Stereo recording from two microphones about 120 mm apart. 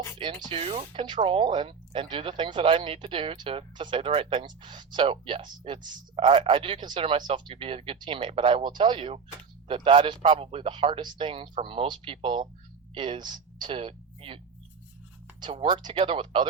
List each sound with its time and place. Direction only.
0.2 s speech: 45° right (ahead or behind)
15.4 s speech: 45° right (ahead or behind)